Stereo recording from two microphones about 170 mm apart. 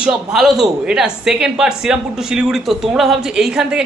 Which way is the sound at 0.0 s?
Centre (ahead or behind).